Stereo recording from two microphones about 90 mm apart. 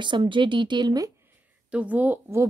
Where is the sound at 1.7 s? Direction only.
15° right (ahead or behind).